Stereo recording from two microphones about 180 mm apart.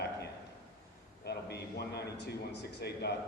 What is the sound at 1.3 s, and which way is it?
A man's voice, 65° left (ahead or behind).